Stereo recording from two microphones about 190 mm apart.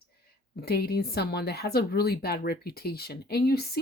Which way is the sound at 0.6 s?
55° left (ahead or behind).